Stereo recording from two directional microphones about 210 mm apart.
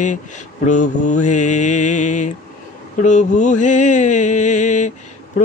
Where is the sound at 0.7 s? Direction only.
35° left (ahead or behind).